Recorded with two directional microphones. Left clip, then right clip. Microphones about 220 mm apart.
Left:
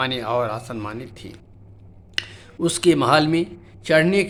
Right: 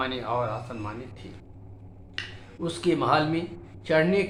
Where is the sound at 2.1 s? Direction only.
50° left (ahead or behind).